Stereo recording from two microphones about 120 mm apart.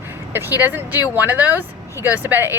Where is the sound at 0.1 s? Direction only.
20° right (ahead or behind).